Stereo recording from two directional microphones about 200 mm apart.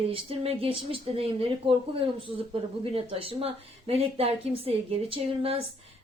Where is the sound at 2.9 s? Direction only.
30° right (ahead or behind).